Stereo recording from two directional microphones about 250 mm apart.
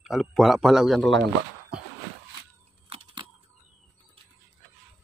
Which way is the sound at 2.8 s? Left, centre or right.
Right.